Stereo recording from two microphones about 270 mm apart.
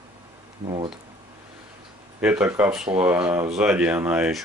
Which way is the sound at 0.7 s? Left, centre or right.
Centre.